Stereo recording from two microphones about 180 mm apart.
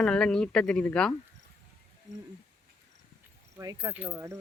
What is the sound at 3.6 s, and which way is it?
Speech, 20° right (ahead or behind).